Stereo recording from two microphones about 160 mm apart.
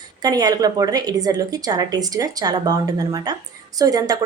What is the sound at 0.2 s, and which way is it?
Speech, 25° right (ahead or behind).